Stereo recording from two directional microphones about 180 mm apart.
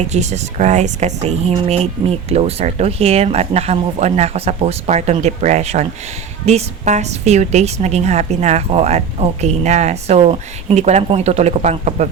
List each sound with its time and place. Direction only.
0.1 s speech: 40° right (ahead or behind)